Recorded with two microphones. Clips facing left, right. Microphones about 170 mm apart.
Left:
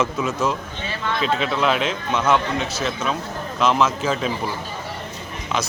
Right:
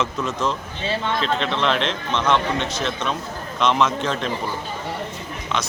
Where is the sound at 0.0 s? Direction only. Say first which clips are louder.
Left 2 dB; 5° left (ahead or behind).